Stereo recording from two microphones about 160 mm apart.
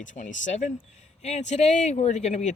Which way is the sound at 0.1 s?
50° left (ahead or behind).